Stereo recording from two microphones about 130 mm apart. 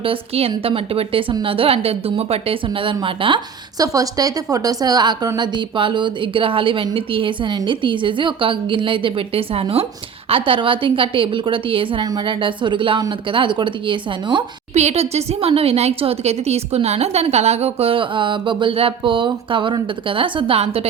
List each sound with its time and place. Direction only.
0.0 s a woman's voice: 45° right (ahead or behind)
3.8 s a woman's voice: 30° right (ahead or behind)
14.7 s a woman's voice: 60° right (ahead or behind)